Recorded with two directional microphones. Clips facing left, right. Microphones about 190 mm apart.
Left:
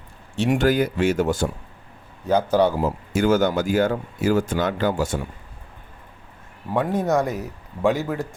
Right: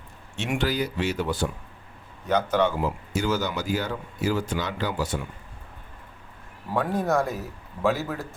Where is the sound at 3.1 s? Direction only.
50° left (ahead or behind).